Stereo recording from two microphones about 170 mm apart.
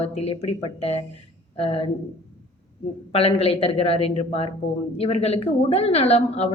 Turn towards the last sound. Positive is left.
turn(degrees=35)  # may be behind; listen again after turning